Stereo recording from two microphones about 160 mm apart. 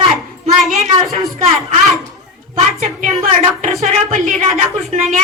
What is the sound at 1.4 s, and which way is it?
A woman's voice, 40° right (ahead or behind).